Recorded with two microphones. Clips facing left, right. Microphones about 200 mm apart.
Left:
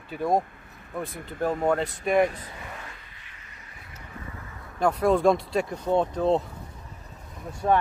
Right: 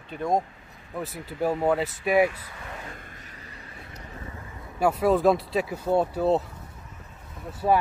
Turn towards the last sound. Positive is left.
turn(degrees=-5)  # may be behind; listen again after turning